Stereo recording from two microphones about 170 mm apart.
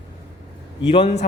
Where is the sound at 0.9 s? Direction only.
30° left (ahead or behind).